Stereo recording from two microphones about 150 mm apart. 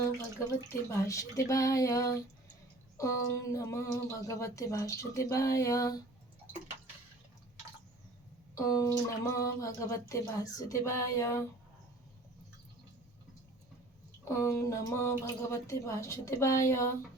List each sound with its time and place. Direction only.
0.3 s speech: 20° left (ahead or behind)
8.5 s speech: 20° left (ahead or behind)
14.3 s speech: 15° left (ahead or behind)